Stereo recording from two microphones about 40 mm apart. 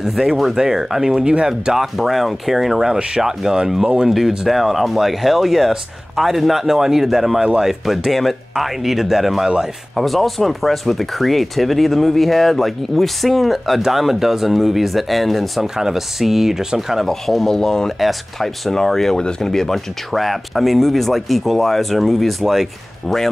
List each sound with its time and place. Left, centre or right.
0.0 s speech: centre
4.5 s speech: centre
15.6 s speech: centre
17.5 s speech: centre
17.9 s speech: centre
18.7 s speech: centre